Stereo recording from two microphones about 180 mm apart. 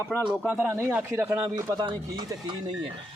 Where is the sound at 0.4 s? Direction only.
10° right (ahead or behind).